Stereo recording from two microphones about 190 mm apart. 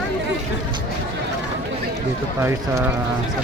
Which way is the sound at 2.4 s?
15° right (ahead or behind).